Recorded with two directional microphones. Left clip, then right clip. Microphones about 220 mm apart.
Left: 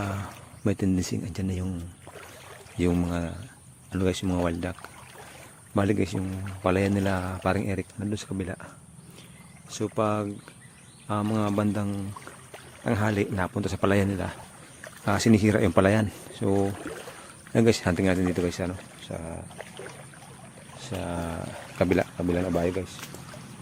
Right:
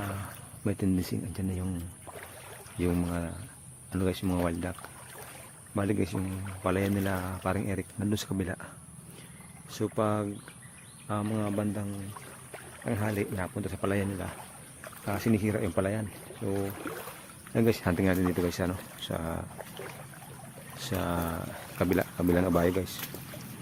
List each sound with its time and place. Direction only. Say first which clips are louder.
0.6 s speech: left 4 dB; 15° left (ahead or behind)
2.7 s speech: left 4 dB; 15° left (ahead or behind)
7.9 s speech: even; 5° right (ahead or behind)
11.1 s speech: left 5 dB; 15° left (ahead or behind)
17.5 s speech: left 5 dB; 15° left (ahead or behind); by 19.5 s 5° right (ahead or behind)
20.7 s speech: right 1 dB; 10° right (ahead or behind)
21.8 s speech: left 4 dB; 10° left (ahead or behind)
22.2 s speech: even; 5° right (ahead or behind)